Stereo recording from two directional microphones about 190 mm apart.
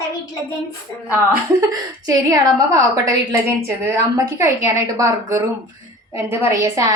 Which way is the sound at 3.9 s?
15° right (ahead or behind).